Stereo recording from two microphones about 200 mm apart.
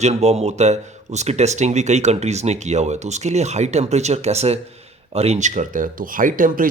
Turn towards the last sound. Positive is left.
turn(degrees=-45)  # may be behind; listen again after turning